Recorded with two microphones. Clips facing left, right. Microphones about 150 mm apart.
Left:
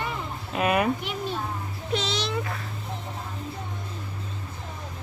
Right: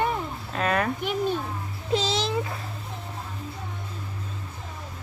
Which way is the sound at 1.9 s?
30° right (ahead or behind).